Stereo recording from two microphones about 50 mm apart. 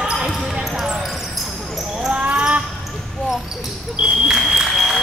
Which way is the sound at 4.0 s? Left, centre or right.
Centre.